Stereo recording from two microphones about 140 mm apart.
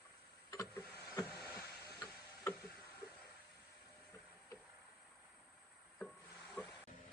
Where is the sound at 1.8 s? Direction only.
20° left (ahead or behind).